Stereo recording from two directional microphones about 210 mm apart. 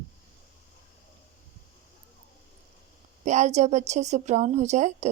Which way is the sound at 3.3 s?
35° right (ahead or behind).